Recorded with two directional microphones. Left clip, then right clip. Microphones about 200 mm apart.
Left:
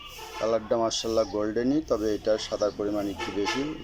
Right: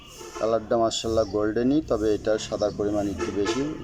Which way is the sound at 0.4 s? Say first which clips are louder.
Right 3 dB; 5° right (ahead or behind).